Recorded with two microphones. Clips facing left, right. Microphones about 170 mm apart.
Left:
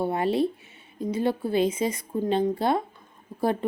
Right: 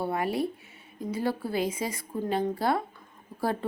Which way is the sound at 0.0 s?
25° left (ahead or behind).